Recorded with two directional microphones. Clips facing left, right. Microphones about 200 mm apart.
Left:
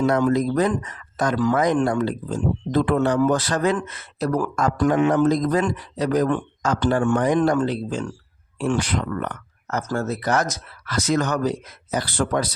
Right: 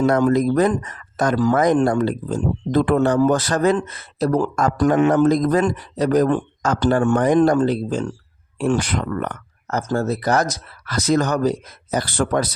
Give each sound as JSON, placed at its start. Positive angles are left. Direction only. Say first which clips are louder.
{"t": 0.0, "sound": "speech", "louder": "right 3 dB", "side_deg": -50}
{"t": 4.5, "sound": "speech", "louder": "right 2 dB", "side_deg": -45}